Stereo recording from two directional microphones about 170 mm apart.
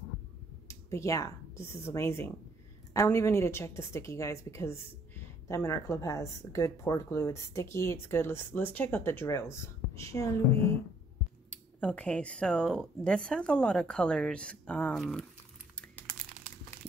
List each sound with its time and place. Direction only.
0.7 s a woman's voice: 15° left (ahead or behind)
11.5 s speech: 5° left (ahead or behind)